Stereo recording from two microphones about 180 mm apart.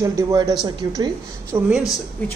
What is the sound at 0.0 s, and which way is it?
Speech, 20° right (ahead or behind).